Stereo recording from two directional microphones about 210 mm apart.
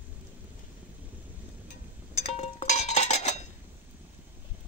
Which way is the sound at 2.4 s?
30° left (ahead or behind).